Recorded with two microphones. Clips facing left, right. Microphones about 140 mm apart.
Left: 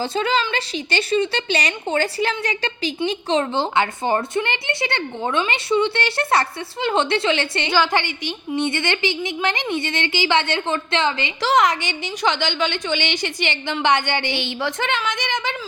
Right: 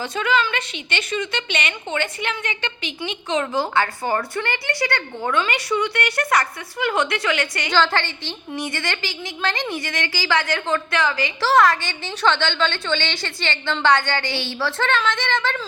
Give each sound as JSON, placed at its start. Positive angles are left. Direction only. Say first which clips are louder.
{"t": 0.0, "sound": "a woman's voice", "louder": "left 1 dB", "side_deg": 30}
{"t": 7.7, "sound": "a woman's voice", "louder": "even", "side_deg": 15}